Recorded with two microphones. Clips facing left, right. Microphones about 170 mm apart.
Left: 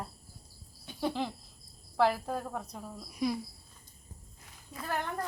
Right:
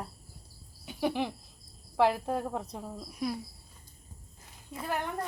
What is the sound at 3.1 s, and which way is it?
Speech, centre (ahead or behind).